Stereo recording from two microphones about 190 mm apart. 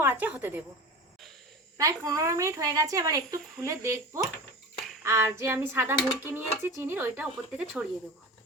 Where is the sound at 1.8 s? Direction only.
20° right (ahead or behind).